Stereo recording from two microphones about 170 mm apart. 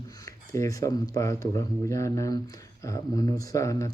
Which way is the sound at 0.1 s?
20° left (ahead or behind).